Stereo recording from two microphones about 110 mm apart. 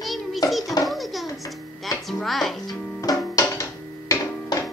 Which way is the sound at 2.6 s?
35° left (ahead or behind).